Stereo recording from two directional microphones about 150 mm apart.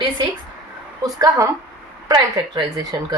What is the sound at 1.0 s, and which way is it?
Speech, 25° right (ahead or behind).